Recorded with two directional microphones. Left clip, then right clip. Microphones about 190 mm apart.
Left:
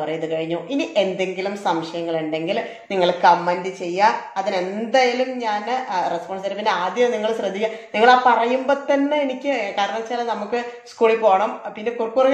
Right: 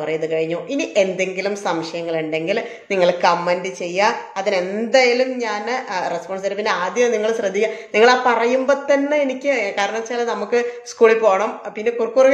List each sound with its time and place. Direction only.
0.0 s speech: 20° right (ahead or behind)